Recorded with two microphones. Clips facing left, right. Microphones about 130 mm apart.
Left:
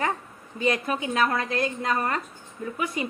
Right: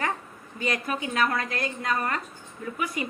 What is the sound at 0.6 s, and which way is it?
A woman's voice, 25° left (ahead or behind).